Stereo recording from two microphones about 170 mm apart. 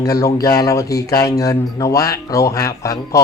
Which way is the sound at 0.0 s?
20° left (ahead or behind).